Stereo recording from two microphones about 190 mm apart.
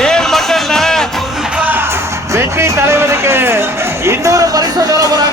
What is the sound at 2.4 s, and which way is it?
Music, 15° right (ahead or behind).